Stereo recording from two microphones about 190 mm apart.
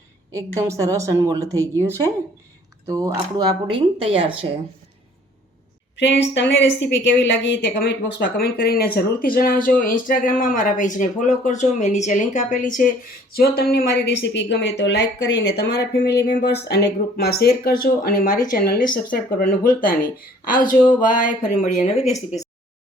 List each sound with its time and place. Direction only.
0.3 s a woman's voice: 15° right (ahead or behind)
6.0 s a woman's voice: 70° left (ahead or behind); by 12.8 s 40° left (ahead or behind)
13.3 s a woman's voice: 55° left (ahead or behind); by 22.4 s 35° left (ahead or behind)